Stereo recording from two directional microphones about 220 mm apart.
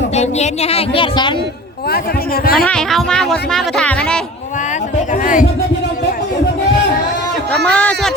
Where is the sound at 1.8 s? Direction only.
45° left (ahead or behind).